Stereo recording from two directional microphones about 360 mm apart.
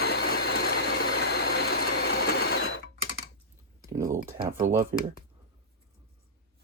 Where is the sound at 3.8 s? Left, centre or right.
Centre.